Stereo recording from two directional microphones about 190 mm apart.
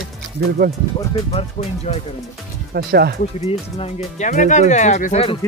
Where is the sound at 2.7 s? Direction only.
55° right (ahead or behind).